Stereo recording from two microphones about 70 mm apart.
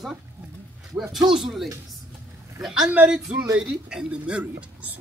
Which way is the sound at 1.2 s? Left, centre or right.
Centre.